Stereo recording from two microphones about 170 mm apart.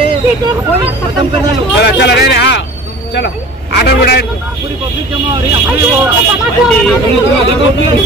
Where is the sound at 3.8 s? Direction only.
70° left (ahead or behind).